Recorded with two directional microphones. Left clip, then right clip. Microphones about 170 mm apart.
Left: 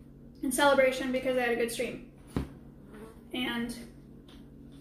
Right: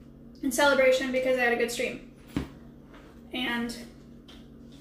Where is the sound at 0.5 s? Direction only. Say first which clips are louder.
Right 3 dB; 15° left (ahead or behind).